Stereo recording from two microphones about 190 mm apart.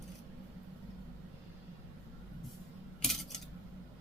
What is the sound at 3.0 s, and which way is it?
Scissors, centre (ahead or behind).